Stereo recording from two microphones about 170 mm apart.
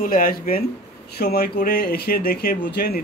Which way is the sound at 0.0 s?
55° left (ahead or behind).